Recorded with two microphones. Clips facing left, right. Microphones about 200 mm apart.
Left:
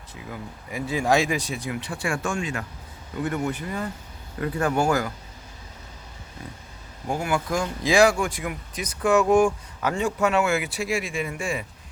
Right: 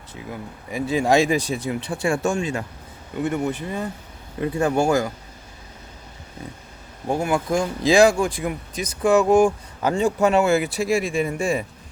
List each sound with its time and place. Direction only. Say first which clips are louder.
0.3 s speech: right 3 dB; 25° right (ahead or behind)
7.1 s speech: right 4 dB; 25° right (ahead or behind)